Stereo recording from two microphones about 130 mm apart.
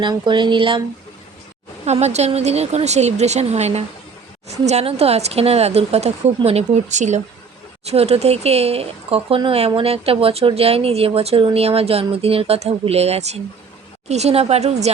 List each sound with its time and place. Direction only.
0.0 s speech: 35° right (ahead or behind)
1.8 s speech: 55° right (ahead or behind)
7.9 s speech: 55° right (ahead or behind)